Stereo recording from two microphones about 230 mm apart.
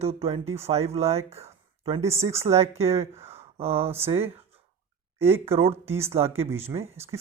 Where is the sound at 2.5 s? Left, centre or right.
Right.